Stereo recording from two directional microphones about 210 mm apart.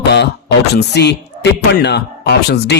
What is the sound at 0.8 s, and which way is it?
Speech, 50° left (ahead or behind).